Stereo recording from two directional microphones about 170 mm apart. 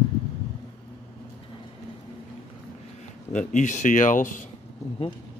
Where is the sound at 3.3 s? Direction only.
45° left (ahead or behind).